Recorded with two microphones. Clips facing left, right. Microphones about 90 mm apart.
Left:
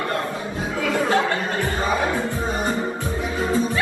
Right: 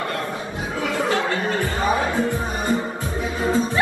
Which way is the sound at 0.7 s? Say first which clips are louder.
Left 1 dB; 25° right (ahead or behind).